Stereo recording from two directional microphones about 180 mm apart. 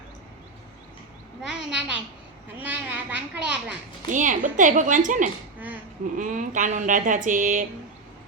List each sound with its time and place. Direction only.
1.5 s a child's voice: 5° right (ahead or behind)
4.0 s speech: 45° right (ahead or behind)